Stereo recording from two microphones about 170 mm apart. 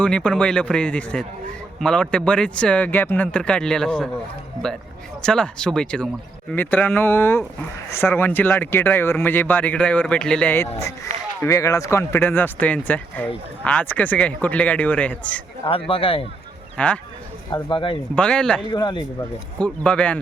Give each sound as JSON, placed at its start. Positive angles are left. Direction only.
{"t": 0.0, "sound": "speech", "side_deg": 5}
{"t": 5.2, "sound": "speech", "side_deg": 5}
{"t": 15.9, "sound": "speech", "side_deg": 35}
{"t": 16.7, "sound": "speech", "side_deg": 10}
{"t": 17.5, "sound": "speech", "side_deg": 30}
{"t": 18.1, "sound": "speech", "side_deg": 5}
{"t": 18.6, "sound": "speech", "side_deg": 25}
{"t": 19.6, "sound": "speech", "side_deg": 5}